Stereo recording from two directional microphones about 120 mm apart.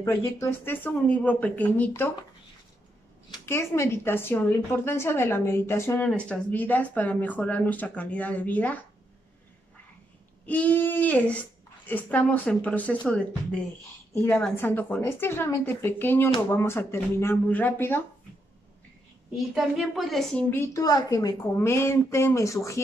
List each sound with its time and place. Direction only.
0.0 s a woman's voice: 25° left (ahead or behind)
0.5 s speech: 15° left (ahead or behind)
3.4 s a woman's voice: 20° left (ahead or behind)
6.0 s speech: 10° left (ahead or behind)
10.4 s a woman's voice: 15° left (ahead or behind)
19.3 s a woman's voice: centre (ahead or behind)
20.3 s speech: 15° left (ahead or behind)
20.7 s a woman's voice: 30° left (ahead or behind)
21.5 s a woman's voice: 20° left (ahead or behind)